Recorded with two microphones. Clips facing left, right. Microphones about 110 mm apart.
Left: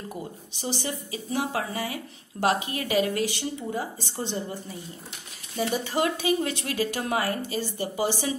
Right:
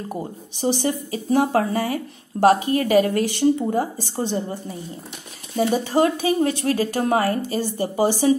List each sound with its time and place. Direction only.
0.1 s speech: 50° right (ahead or behind)